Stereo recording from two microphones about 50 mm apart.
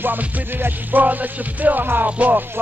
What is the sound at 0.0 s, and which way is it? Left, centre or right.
Music, right.